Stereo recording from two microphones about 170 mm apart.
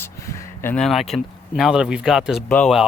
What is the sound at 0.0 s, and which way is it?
Speech, 15° left (ahead or behind).